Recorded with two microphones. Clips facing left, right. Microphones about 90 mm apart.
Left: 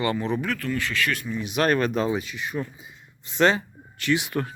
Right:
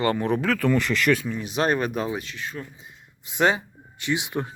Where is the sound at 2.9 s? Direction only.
10° right (ahead or behind).